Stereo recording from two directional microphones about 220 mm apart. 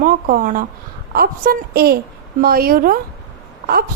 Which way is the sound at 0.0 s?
40° right (ahead or behind).